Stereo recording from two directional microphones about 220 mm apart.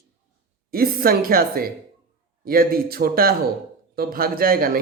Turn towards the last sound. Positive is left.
turn(degrees=-40)  # may be behind; listen again after turning